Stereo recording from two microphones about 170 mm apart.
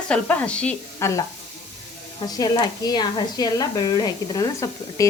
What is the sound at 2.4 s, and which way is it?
A woman's voice, 25° left (ahead or behind).